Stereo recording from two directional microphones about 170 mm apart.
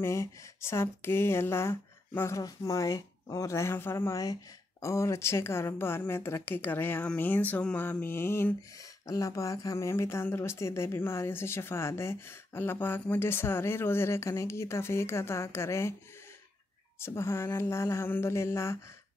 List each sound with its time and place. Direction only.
0.0 s speech: 15° left (ahead or behind)
17.0 s speech: 15° left (ahead or behind)